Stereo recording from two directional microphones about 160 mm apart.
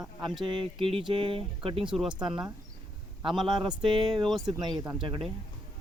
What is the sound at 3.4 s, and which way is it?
Speech, 30° right (ahead or behind).